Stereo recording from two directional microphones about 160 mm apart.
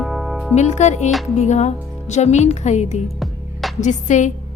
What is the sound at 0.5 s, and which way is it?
Speech, 45° left (ahead or behind).